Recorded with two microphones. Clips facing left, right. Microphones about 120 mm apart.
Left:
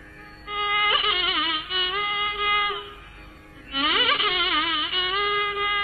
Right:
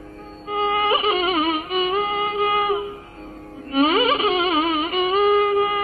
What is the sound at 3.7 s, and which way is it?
Humming, 35° right (ahead or behind).